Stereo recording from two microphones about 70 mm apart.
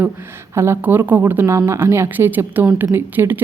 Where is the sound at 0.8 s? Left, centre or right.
Right.